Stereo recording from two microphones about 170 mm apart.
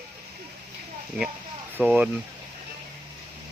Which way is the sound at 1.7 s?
10° right (ahead or behind).